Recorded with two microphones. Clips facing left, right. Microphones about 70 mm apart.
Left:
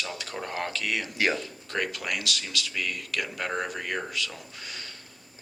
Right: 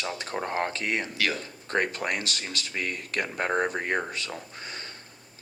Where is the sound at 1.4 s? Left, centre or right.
Right.